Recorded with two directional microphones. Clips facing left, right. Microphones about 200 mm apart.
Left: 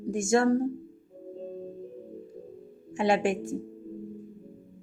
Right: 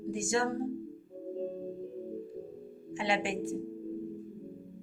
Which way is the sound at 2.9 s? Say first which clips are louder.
Left 7 dB; 45° left (ahead or behind).